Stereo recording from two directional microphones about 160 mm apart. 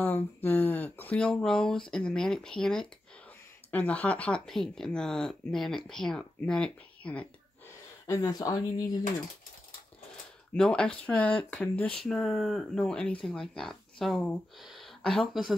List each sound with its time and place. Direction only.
0.0 s speech: 15° left (ahead or behind)
8.1 s speech: 25° left (ahead or behind)
10.5 s speech: 5° left (ahead or behind)